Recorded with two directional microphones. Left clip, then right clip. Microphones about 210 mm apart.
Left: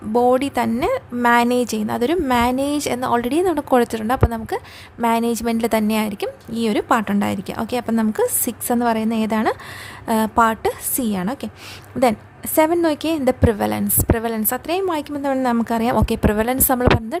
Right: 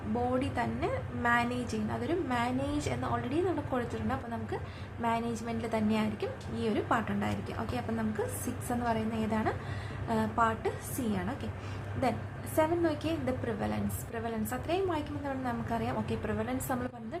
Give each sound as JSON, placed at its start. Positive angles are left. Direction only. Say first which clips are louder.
{"t": 0.3, "sound": "speech", "louder": "left 15 dB", "side_deg": 55}
{"t": 12.5, "sound": "speech", "louder": "left 13 dB", "side_deg": 50}